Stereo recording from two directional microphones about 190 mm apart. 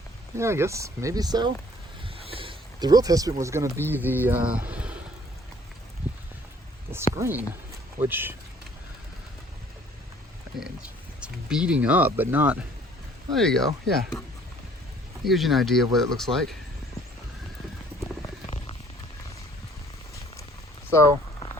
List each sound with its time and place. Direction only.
0.3 s speech: 15° right (ahead or behind)
2.1 s a sound: 30° right (ahead or behind)
3.4 s speech: 15° right (ahead or behind)
7.2 s speech: 10° right (ahead or behind)
11.2 s speech: 5° right (ahead or behind)
13.3 s speech: centre (ahead or behind)
15.2 s speech: centre (ahead or behind)
18.4 s a sound: 30° left (ahead or behind)
20.9 s a sound: 15° left (ahead or behind)